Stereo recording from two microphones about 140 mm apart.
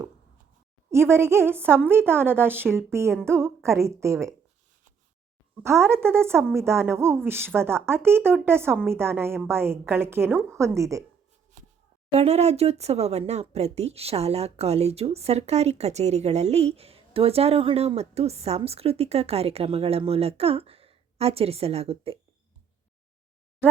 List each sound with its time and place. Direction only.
1.1 s a woman's voice: 20° right (ahead or behind)
5.6 s a woman's voice: 20° right (ahead or behind)
12.1 s speech: 50° right (ahead or behind)